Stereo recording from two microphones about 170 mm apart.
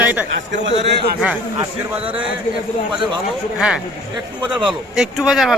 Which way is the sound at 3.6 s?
5° right (ahead or behind).